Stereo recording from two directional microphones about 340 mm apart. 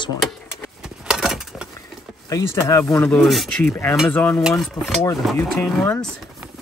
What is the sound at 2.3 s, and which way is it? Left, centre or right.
Speech, centre.